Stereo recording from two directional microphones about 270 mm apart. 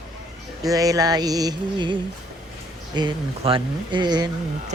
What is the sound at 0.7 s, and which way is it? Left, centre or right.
Speech, centre.